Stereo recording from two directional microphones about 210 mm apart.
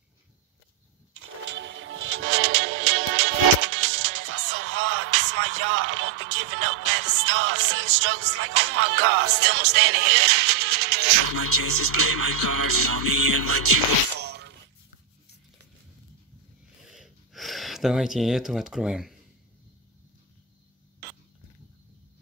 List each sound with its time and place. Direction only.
1.5 s music: 60° right (ahead or behind); by 3.3 s 75° right (ahead or behind)
3.7 s music: 90° right; by 9.1 s 75° right (ahead or behind)
9.4 s music: 50° right (ahead or behind)
11.3 s speech: 90° right
14.2 s a sound: 55° right (ahead or behind)
16.9 s a sound: centre (ahead or behind)